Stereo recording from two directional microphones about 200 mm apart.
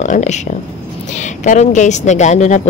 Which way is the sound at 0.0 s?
35° left (ahead or behind).